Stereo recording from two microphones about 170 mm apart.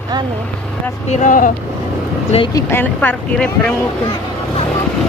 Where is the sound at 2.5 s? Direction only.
15° left (ahead or behind).